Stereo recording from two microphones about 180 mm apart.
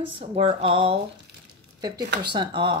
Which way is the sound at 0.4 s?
30° right (ahead or behind).